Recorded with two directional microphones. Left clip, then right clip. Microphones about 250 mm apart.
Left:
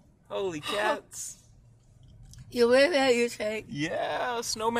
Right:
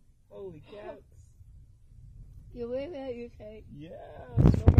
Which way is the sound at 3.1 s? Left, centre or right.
Left.